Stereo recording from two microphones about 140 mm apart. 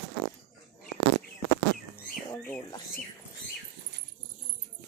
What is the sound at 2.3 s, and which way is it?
Speech, 15° left (ahead or behind).